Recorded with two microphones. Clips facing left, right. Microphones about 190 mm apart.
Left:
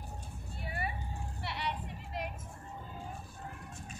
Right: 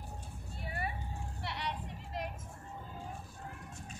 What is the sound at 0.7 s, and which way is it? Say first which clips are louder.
Vehicle: left 1 dB; 5° left (ahead or behind).